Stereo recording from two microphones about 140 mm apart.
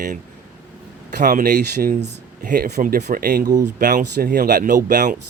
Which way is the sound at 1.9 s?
65° right (ahead or behind).